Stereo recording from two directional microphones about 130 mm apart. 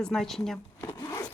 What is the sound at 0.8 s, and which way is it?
Zipper, 30° left (ahead or behind).